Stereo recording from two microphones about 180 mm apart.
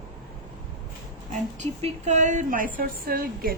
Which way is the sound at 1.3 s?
40° right (ahead or behind).